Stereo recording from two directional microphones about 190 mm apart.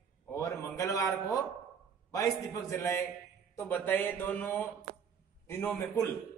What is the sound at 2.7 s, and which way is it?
Speech, 15° left (ahead or behind).